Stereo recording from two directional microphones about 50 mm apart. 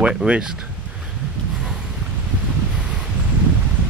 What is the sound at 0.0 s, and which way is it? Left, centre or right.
Speech, centre.